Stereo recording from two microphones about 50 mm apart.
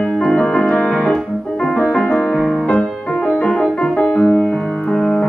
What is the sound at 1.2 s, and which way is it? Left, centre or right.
Keyboard, centre.